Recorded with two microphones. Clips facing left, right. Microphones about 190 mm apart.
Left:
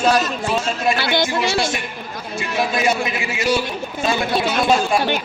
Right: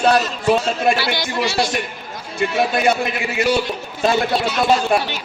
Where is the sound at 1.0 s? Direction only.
55° left (ahead or behind).